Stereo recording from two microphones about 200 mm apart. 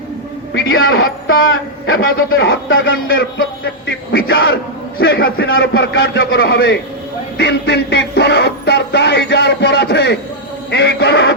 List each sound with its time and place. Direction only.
0.7 s a man's voice: 85° left
3.1 s music: 55° left (ahead or behind); by 4.5 s 70° left (ahead or behind)
4.9 s a man's voice: 70° left (ahead or behind)
5.7 s music: 60° left (ahead or behind)